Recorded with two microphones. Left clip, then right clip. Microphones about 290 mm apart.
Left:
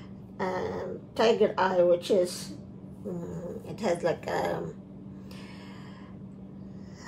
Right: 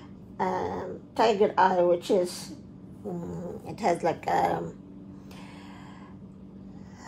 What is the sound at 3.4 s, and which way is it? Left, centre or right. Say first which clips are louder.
Speech: right 3 dB; right.